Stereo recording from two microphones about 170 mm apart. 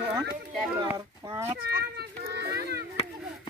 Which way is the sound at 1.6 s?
75° right (ahead or behind).